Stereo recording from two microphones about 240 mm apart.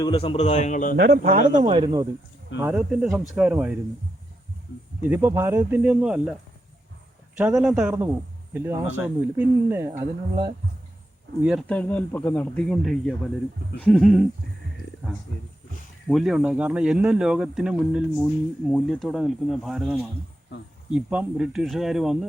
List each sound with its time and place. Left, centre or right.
0.0 s a man's voice: left
0.9 s speech: right
1.5 s speech: right
2.6 s speech: centre
5.0 s speech: centre
7.3 s speech: centre
11.4 s speech: centre
16.0 s speech: centre